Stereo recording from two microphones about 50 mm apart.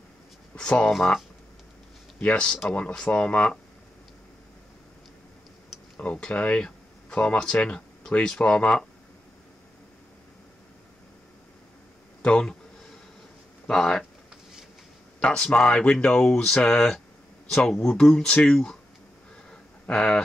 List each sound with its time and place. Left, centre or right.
0.6 s speech: left
2.1 s speech: left
5.9 s speech: left
12.2 s speech: left
13.7 s speech: centre
15.1 s speech: left
17.5 s speech: centre
19.9 s speech: centre